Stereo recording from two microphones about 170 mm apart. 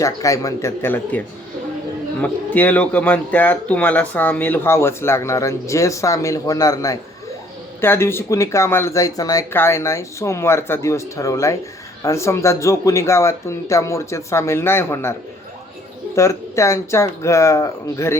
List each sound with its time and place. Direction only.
0.0 s speech: 20° left (ahead or behind)
2.2 s speech: 10° left (ahead or behind)
16.1 s speech: 15° left (ahead or behind)